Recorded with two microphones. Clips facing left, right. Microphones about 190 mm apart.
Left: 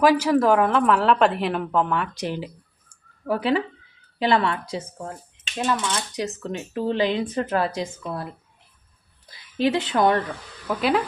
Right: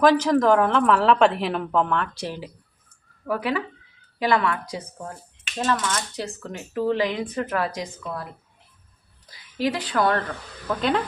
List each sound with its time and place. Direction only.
0.0 s a woman's voice: 10° left (ahead or behind)
2.1 s speech: 20° left (ahead or behind)
3.2 s speech: 30° left (ahead or behind)
5.5 s speech: 10° left (ahead or behind); by 8.3 s 25° left (ahead or behind)
9.6 s speech: 25° left (ahead or behind)
10.7 s speech: 5° left (ahead or behind)